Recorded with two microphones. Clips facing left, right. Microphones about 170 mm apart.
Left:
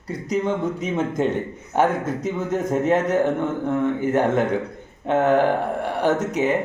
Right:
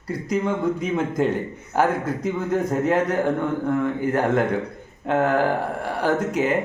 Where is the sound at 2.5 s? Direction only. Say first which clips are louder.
Left 1 dB; 20° left (ahead or behind).